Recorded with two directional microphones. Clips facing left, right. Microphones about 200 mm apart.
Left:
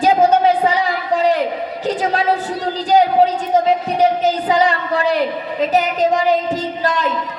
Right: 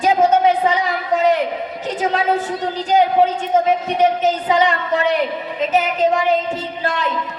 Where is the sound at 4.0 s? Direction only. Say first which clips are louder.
Left 1 dB; 35° left (ahead or behind).